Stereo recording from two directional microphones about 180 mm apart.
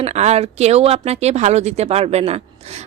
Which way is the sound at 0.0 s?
40° right (ahead or behind).